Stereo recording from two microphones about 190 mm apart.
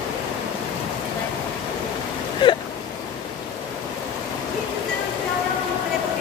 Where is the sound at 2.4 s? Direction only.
25° left (ahead or behind).